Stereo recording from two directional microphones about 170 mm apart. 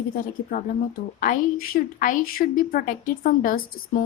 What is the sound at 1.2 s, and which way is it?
A woman's voice, 55° left (ahead or behind).